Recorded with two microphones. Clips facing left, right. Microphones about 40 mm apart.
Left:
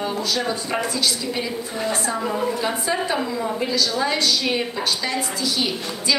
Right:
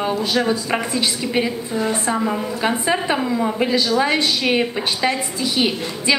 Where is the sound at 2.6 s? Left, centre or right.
Right.